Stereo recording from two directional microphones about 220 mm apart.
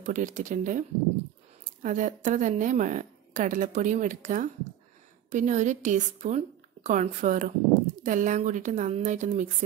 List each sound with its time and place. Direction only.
0.0 s a woman's voice: 35° right (ahead or behind)